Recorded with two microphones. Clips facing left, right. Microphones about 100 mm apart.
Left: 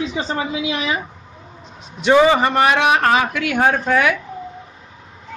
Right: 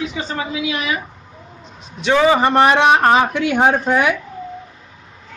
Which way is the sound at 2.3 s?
30° right (ahead or behind).